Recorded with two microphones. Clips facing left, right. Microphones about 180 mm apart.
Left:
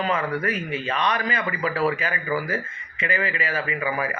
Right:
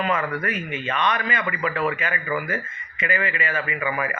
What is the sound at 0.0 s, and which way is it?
Speech, 30° left (ahead or behind).